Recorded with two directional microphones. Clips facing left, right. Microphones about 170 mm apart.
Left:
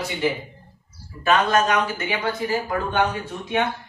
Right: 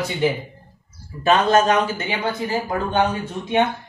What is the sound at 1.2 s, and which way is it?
A man's voice, 30° right (ahead or behind).